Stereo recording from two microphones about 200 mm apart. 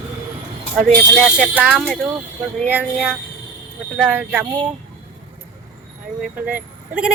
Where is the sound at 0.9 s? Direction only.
Centre (ahead or behind).